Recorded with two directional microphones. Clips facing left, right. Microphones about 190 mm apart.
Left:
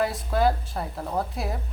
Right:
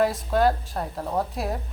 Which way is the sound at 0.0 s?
Centre (ahead or behind).